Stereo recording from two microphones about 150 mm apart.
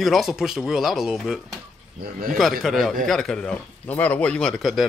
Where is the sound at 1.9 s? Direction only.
75° right (ahead or behind).